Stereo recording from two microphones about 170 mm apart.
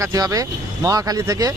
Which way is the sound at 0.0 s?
20° right (ahead or behind).